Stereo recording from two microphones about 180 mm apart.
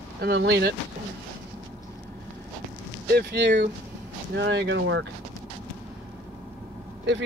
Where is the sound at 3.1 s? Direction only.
65° right (ahead or behind).